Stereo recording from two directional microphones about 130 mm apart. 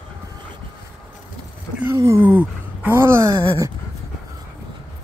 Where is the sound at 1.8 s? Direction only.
20° right (ahead or behind).